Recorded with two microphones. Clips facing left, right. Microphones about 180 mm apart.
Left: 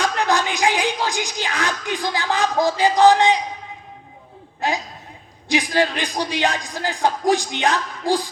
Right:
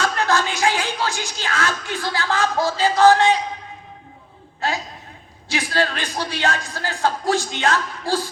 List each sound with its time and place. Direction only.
0.0 s speech: 15° left (ahead or behind)
4.6 s speech: 15° left (ahead or behind)